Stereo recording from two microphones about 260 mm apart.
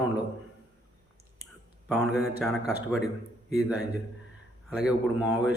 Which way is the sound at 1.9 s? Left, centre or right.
Centre.